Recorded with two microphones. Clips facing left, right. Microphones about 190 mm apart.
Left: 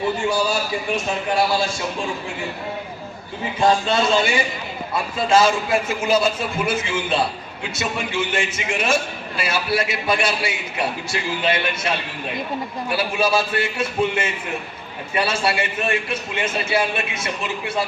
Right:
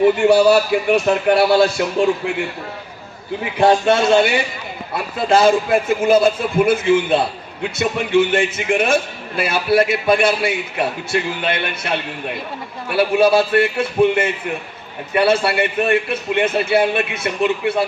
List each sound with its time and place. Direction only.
0.2 s a man's voice: 65° right (ahead or behind)
3.6 s a man's voice: 60° right (ahead or behind)